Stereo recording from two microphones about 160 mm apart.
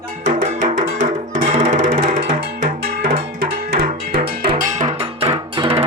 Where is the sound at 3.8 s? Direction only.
70° right (ahead or behind).